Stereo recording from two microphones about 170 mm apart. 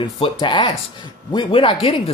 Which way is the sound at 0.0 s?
30° left (ahead or behind).